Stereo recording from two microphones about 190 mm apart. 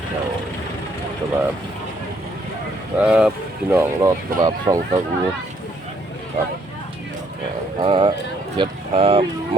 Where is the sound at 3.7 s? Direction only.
15° right (ahead or behind).